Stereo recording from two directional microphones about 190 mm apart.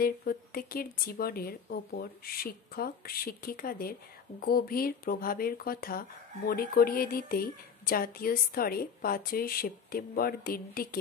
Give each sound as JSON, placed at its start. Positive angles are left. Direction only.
{"t": 0.0, "sound": "speech", "side_deg": 50}